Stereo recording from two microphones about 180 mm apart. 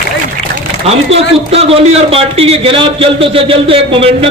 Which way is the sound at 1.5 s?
35° right (ahead or behind).